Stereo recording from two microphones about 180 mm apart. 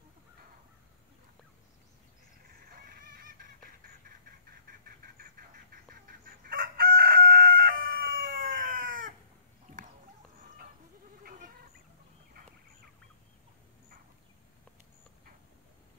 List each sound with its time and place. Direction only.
2.7 s a sound: 50° right (ahead or behind)
6.0 s chicken: 50° right (ahead or behind)
11.2 s goat: 50° right (ahead or behind)